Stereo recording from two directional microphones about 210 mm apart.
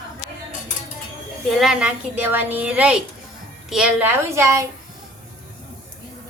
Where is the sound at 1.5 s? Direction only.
5° right (ahead or behind).